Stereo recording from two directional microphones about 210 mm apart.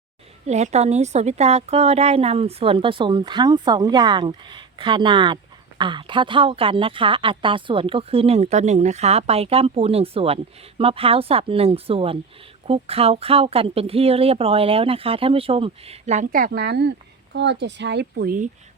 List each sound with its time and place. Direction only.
0.4 s a woman's voice: 30° right (ahead or behind)